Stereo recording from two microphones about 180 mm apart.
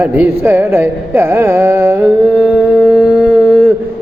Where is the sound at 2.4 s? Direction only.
10° right (ahead or behind).